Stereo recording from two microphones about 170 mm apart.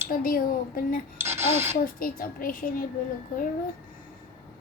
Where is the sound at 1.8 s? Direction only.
55° left (ahead or behind).